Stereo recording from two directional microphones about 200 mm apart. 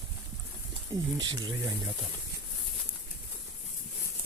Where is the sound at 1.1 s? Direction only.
20° right (ahead or behind).